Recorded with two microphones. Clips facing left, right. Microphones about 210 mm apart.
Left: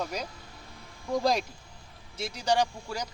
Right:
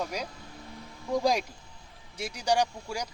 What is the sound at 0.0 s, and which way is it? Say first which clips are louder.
Speech: even; 10° right (ahead or behind).